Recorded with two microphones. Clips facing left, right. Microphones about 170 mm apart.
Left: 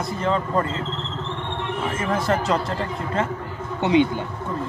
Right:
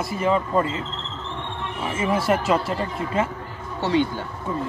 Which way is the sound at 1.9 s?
10° right (ahead or behind).